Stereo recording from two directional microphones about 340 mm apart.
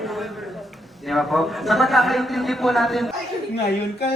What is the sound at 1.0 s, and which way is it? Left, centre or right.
A man's voice, centre.